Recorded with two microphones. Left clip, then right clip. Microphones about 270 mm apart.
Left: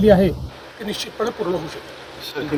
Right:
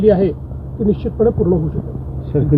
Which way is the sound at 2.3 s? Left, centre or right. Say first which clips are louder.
Right 8 dB; centre.